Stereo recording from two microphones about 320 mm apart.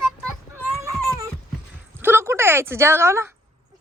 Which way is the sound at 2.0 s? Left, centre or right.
Centre.